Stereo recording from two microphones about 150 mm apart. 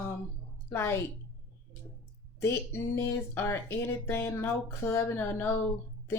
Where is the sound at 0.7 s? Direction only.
15° left (ahead or behind).